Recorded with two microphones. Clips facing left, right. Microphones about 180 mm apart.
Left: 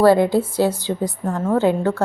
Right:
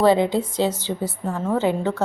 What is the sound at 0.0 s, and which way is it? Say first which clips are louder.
A woman's voice: left 3 dB; 10° left (ahead or behind).